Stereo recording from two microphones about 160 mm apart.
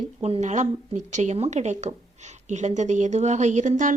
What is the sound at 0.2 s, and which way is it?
Speech, 45° right (ahead or behind).